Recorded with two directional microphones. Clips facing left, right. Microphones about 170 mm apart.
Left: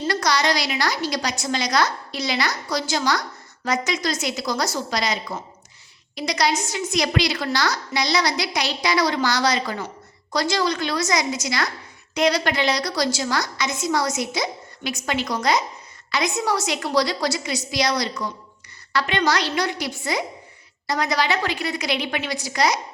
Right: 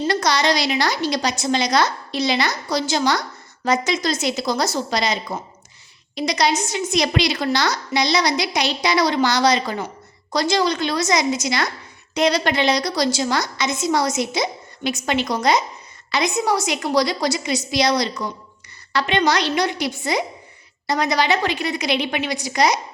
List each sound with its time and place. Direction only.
0.1 s a woman's voice: 25° right (ahead or behind)